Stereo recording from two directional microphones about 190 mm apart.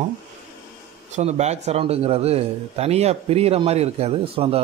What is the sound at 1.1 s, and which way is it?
Speech, 35° right (ahead or behind).